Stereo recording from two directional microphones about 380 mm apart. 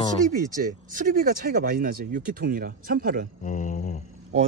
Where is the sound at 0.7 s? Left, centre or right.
Right.